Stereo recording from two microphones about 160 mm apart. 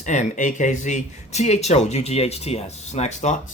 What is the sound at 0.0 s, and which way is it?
Speech, 50° left (ahead or behind).